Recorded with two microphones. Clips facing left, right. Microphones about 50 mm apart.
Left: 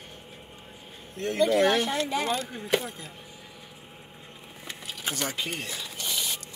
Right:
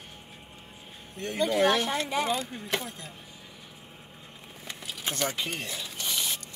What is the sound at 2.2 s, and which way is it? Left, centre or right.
Speech, centre.